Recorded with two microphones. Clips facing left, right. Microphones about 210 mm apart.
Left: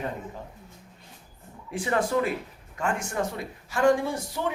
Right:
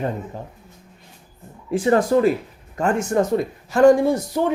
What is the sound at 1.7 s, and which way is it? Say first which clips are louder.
A man's voice: right 9 dB; 40° right (ahead or behind).